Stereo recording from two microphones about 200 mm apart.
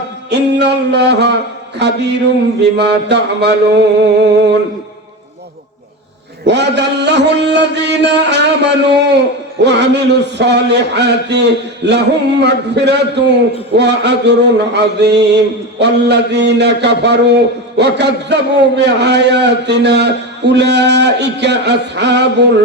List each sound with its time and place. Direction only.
0.3 s music: 55° right (ahead or behind)
1.8 s a man's voice: 55° right (ahead or behind)
6.4 s a man's voice: 60° right (ahead or behind)